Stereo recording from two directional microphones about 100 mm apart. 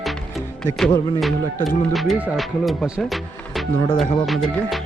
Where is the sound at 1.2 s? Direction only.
Centre (ahead or behind).